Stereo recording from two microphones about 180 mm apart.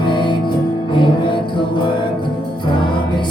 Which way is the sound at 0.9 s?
25° left (ahead or behind).